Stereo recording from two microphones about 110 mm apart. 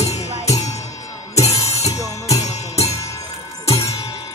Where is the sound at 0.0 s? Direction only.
75° left (ahead or behind).